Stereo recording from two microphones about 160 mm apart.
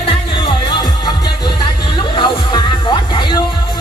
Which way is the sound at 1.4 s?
30° left (ahead or behind).